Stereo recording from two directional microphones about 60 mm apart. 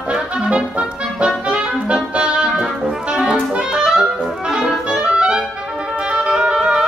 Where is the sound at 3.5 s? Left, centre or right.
Centre.